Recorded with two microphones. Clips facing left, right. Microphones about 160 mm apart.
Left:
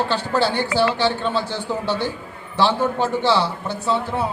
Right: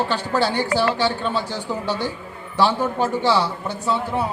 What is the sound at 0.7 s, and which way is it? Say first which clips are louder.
Speech: left 1 dB; 40° right (ahead or behind).